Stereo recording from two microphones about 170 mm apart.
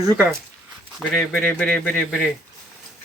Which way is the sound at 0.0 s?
20° right (ahead or behind).